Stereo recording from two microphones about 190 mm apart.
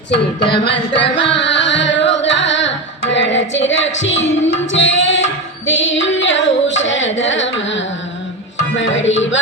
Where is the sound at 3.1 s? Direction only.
70° left (ahead or behind).